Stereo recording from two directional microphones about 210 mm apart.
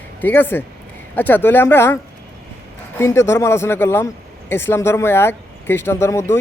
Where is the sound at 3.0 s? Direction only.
10° left (ahead or behind).